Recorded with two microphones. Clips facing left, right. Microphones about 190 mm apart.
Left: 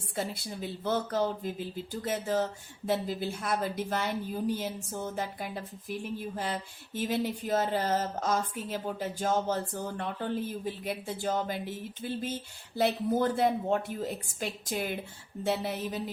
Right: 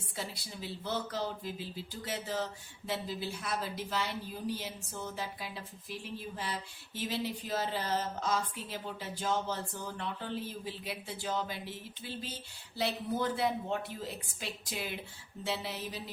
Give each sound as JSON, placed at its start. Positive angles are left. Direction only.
{"t": 0.2, "sound": "speech", "side_deg": 50}